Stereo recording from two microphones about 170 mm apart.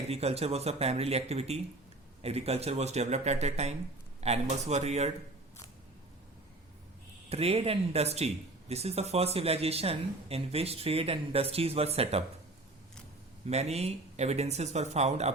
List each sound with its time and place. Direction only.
0.1 s speech: 35° right (ahead or behind)
7.3 s speech: 35° right (ahead or behind)
13.5 s speech: 40° right (ahead or behind)